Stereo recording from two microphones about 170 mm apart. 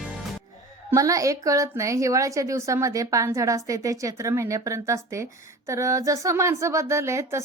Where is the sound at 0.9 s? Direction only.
20° right (ahead or behind).